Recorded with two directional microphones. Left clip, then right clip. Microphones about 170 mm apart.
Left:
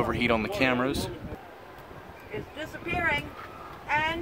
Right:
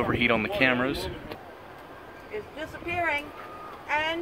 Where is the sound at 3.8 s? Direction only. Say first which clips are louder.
Even; 60° left (ahead or behind).